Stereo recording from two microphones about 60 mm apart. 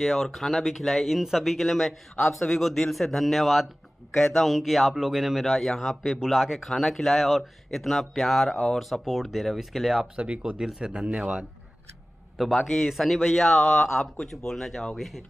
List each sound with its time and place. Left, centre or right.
0.0 s speech: centre
10.1 s speech: centre
12.4 s speech: centre